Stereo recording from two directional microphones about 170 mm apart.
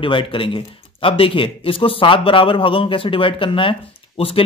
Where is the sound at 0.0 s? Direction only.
30° left (ahead or behind).